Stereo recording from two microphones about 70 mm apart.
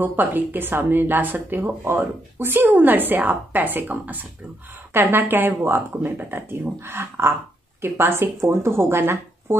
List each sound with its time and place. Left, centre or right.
0.0 s speech: right